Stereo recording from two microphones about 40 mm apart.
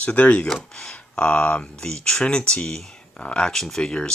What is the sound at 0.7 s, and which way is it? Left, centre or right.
Speech, centre.